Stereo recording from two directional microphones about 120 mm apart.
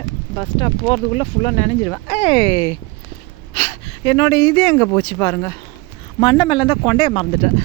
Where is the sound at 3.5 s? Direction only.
55° left (ahead or behind).